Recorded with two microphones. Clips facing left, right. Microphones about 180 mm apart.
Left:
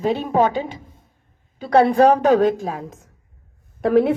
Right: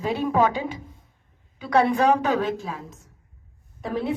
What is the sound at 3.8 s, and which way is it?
Speech, 65° left (ahead or behind).